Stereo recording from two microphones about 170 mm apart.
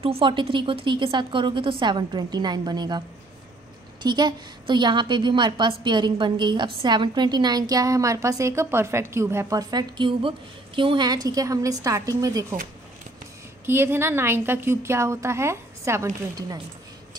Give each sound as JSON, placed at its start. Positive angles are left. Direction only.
{"t": 0.0, "sound": "a woman's voice", "side_deg": -30}
{"t": 4.0, "sound": "a woman's voice", "side_deg": -25}
{"t": 13.7, "sound": "a woman's voice", "side_deg": -15}